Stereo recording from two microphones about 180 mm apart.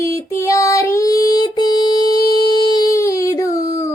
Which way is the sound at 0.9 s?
20° left (ahead or behind).